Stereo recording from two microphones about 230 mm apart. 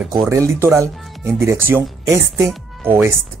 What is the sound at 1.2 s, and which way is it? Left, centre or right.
Speech, centre.